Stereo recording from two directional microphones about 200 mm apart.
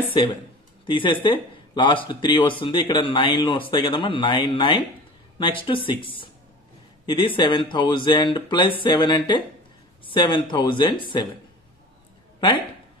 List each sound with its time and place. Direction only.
0.0 s speech: 25° left (ahead or behind)